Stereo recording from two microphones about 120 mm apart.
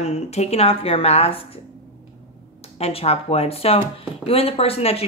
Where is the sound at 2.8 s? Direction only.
55° left (ahead or behind).